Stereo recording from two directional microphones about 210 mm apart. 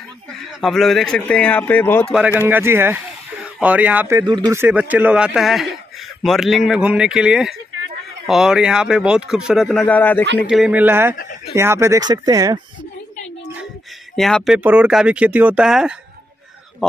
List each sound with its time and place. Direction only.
0.5 s speech: centre (ahead or behind)
2.4 s speech: 10° right (ahead or behind); by 10.2 s 10° left (ahead or behind)
10.4 s speech: 5° right (ahead or behind)
11.1 s speech: 40° left (ahead or behind)
11.5 s speech: 15° right (ahead or behind)
14.1 s speech: centre (ahead or behind)